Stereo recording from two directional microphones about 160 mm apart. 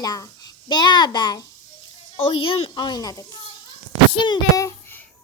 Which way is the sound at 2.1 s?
35° left (ahead or behind).